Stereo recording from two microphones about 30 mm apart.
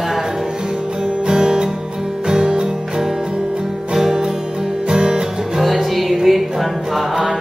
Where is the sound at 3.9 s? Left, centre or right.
Centre.